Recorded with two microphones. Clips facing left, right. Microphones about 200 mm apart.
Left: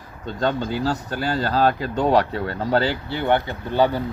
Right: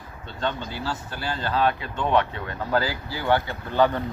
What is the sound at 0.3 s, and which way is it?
Speech, 40° left (ahead or behind).